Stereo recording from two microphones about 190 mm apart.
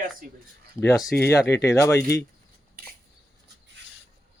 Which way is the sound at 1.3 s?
15° left (ahead or behind).